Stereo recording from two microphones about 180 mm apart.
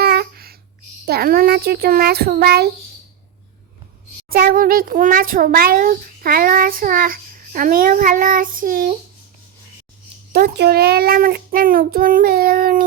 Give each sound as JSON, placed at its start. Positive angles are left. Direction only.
{"t": 0.0, "sound": "babbling", "side_deg": -60}
{"t": 1.0, "sound": "a child's voice", "side_deg": -60}
{"t": 4.3, "sound": "a child's voice", "side_deg": -55}
{"t": 10.3, "sound": "a child's voice", "side_deg": -65}